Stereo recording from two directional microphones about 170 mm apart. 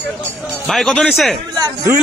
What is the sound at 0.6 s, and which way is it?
Speech, centre (ahead or behind).